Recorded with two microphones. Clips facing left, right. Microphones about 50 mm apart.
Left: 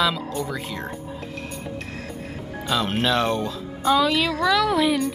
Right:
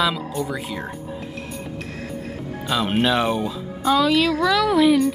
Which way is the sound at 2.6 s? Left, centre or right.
Centre.